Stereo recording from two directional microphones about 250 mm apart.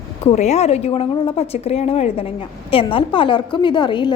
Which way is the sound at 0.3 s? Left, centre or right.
Left.